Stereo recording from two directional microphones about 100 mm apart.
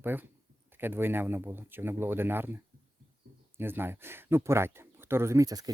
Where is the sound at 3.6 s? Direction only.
20° right (ahead or behind).